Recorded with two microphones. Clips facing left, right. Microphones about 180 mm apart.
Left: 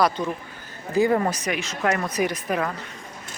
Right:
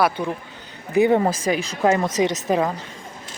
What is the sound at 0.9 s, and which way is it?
A woman's voice, 20° right (ahead or behind).